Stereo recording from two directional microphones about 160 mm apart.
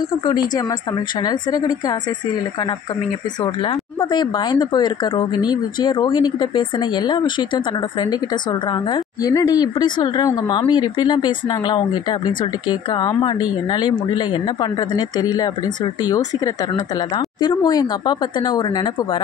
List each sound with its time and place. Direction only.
0.6 s speech: 25° left (ahead or behind)
3.4 s speech: 30° left (ahead or behind)